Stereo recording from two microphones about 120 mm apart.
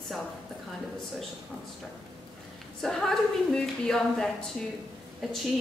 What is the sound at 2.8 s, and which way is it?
A woman's voice, centre (ahead or behind).